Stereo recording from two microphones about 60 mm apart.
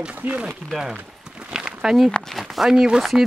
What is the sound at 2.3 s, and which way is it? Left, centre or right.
Speech, centre.